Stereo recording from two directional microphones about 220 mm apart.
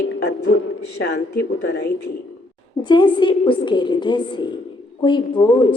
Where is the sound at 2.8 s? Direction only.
20° left (ahead or behind).